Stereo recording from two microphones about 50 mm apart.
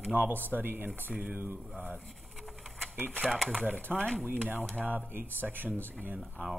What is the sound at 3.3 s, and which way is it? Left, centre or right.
Speech, centre.